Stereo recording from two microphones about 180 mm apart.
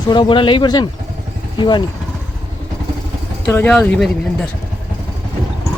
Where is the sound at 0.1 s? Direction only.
25° left (ahead or behind).